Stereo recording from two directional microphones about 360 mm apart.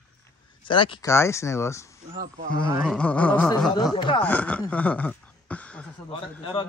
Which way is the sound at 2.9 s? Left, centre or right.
Centre.